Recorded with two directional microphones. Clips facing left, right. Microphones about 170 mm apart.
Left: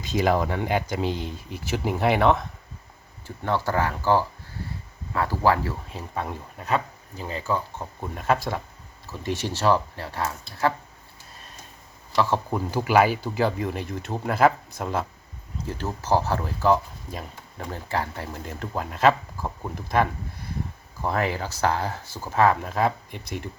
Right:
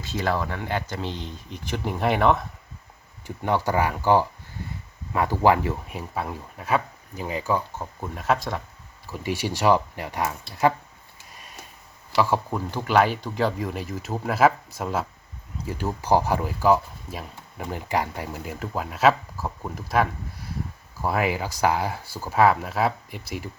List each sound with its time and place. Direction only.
0.0 s speech: 15° left (ahead or behind); by 2.5 s centre (ahead or behind)
3.2 s speech: 15° right (ahead or behind)
8.0 s speech: centre (ahead or behind)
9.2 s speech: 10° right (ahead or behind)
12.1 s speech: 10° right (ahead or behind)
12.5 s speech: 5° left (ahead or behind)
17.7 s speech: 15° right (ahead or behind)